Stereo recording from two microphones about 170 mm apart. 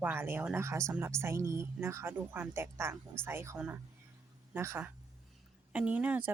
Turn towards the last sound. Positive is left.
turn(degrees=-10)  # may be behind; listen again after turning